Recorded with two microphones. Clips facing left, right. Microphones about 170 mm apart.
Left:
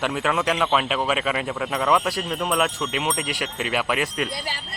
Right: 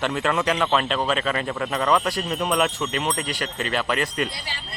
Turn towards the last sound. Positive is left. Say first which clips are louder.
# even
turn(degrees=5)  # may be behind; listen again after turning